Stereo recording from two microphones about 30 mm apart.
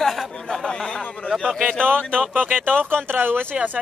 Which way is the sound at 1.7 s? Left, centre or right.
Left.